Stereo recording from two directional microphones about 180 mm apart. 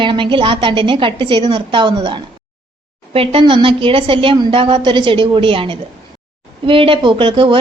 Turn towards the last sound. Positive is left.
turn(degrees=-30)  # may be behind; listen again after turning